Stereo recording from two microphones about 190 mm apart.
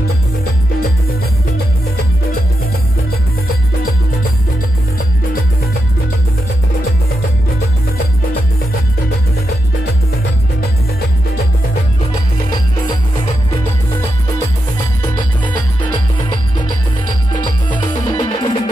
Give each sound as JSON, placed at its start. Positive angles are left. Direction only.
{"t": 17.4, "sound": "music", "side_deg": 25}